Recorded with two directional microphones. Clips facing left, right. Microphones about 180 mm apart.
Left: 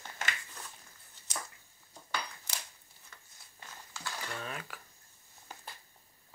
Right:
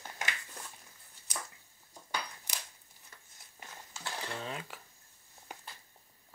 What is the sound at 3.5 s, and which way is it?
Cutlery, 25° right (ahead or behind).